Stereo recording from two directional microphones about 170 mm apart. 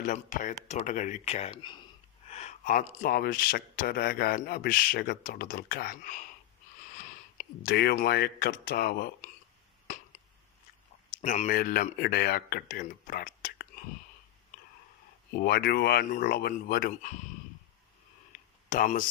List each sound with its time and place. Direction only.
0.0 s speech: 50° left (ahead or behind); by 1.8 s 25° left (ahead or behind)
2.2 s speech: 40° left (ahead or behind)
7.0 s speech: 60° left (ahead or behind)
11.1 s speech: 45° left (ahead or behind)
15.3 s speech: 65° left (ahead or behind)
18.7 s speech: 50° left (ahead or behind)